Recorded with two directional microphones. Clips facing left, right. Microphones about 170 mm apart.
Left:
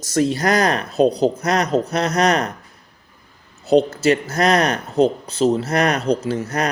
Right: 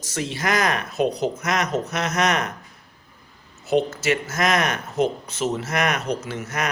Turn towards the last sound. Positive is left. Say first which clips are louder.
# left 7 dB
turn(degrees=35)  # may be behind; listen again after turning